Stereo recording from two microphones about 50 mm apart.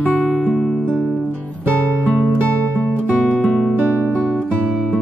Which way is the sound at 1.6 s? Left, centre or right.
Right.